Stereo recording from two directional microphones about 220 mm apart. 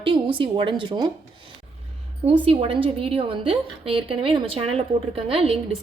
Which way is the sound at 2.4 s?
25° right (ahead or behind).